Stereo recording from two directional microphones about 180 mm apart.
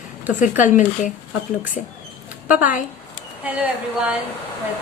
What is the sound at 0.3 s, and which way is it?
Speech, 45° left (ahead or behind).